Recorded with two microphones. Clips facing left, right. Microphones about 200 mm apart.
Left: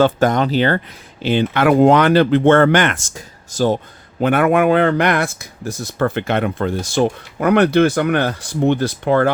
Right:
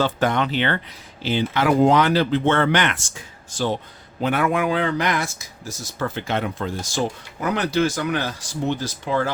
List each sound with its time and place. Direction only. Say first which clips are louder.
0.0 s speech: left 6 dB; 45° left (ahead or behind)
1.2 s speech: left 5 dB; 60° left (ahead or behind); by 3.8 s 40° left (ahead or behind)
4.2 s speech: left 7 dB; 55° left (ahead or behind)